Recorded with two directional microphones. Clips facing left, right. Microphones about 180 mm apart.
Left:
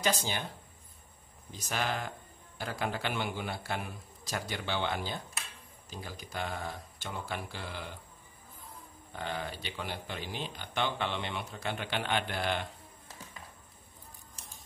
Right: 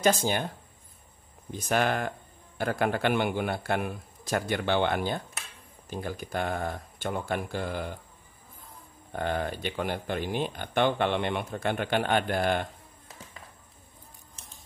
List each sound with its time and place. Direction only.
0.0 s speech: 50° right (ahead or behind)
1.5 s a man's voice: 55° right (ahead or behind)
9.1 s speech: 55° right (ahead or behind)